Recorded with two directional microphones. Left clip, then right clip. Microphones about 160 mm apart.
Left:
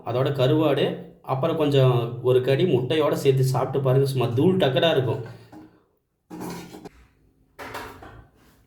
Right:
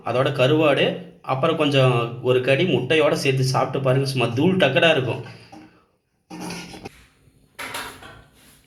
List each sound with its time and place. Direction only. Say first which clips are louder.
0.0 s a man's voice: right 4 dB; centre (ahead or behind)